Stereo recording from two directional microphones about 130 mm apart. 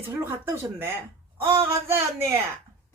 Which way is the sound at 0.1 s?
15° right (ahead or behind).